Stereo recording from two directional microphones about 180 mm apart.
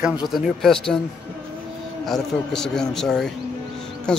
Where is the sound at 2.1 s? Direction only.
5° left (ahead or behind).